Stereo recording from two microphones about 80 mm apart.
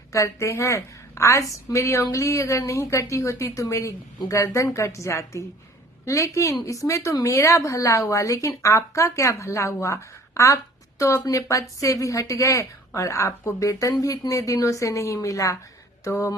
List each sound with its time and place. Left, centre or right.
0.1 s a woman's voice: left